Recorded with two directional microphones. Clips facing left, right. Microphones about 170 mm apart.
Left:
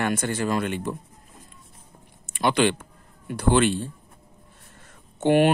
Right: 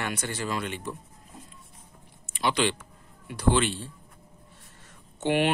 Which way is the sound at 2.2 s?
55° left (ahead or behind).